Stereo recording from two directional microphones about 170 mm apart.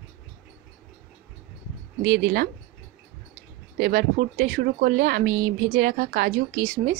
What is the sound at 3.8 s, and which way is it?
A woman's voice, 60° right (ahead or behind).